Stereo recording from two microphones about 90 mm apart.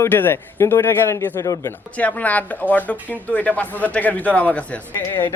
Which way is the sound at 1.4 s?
40° left (ahead or behind).